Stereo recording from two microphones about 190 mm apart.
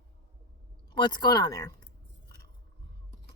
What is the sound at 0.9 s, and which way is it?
Speech, 25° left (ahead or behind).